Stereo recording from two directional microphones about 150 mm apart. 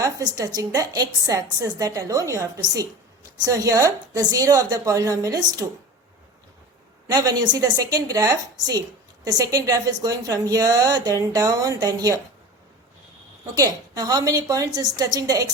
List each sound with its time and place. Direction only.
0.0 s a woman's voice: 25° right (ahead or behind)
7.1 s a woman's voice: 25° right (ahead or behind)
13.6 s a woman's voice: 25° right (ahead or behind)